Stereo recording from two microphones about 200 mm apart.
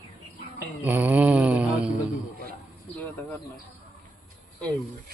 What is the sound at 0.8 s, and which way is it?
Mantra, 10° right (ahead or behind).